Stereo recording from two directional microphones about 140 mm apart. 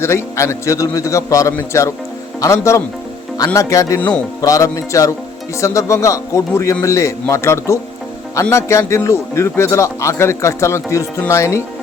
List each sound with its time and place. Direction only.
0.0 s a man's voice: 20° left (ahead or behind)